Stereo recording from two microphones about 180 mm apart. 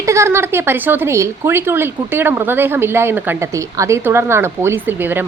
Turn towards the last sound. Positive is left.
turn(degrees=-10)  # may be behind; listen again after turning